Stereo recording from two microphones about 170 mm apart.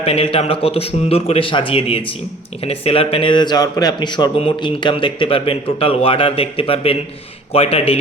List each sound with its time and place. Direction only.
0.0 s a man's voice: 35° left (ahead or behind)